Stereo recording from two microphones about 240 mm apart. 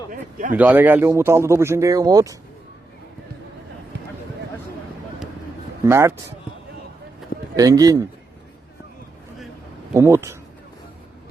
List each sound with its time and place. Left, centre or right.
0.1 s speech: right
0.5 s speech: centre
5.8 s speech: centre
7.5 s speech: centre
9.9 s speech: centre